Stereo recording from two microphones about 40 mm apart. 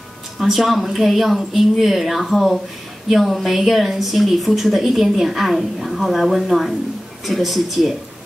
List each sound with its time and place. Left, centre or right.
0.4 s a woman's voice: centre